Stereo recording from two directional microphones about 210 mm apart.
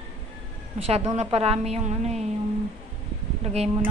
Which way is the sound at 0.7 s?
30° right (ahead or behind).